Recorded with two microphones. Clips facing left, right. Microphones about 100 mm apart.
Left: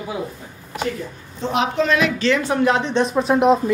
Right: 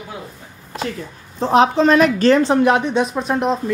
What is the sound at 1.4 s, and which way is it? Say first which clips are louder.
A woman's voice: right 6 dB; 35° right (ahead or behind).